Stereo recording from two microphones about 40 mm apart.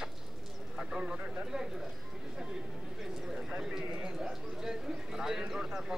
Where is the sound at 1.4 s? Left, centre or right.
Centre.